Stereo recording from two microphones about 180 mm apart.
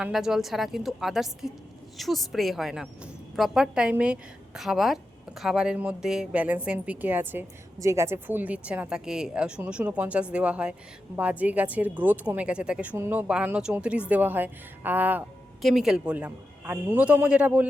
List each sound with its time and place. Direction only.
0.0 s a woman's voice: centre (ahead or behind)